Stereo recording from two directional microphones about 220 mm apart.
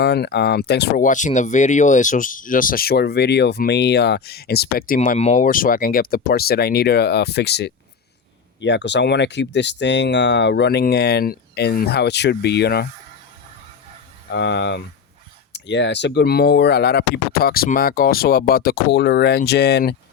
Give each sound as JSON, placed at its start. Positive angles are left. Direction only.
{"t": 0.0, "sound": "speech", "side_deg": 50}
{"t": 14.3, "sound": "speech", "side_deg": 50}